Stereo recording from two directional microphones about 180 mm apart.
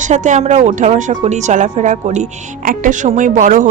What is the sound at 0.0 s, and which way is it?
Speech, 45° right (ahead or behind).